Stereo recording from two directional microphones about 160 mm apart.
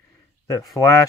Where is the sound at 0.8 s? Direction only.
20° left (ahead or behind).